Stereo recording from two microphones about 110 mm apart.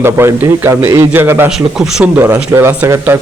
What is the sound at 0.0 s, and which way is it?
Speech, 25° right (ahead or behind).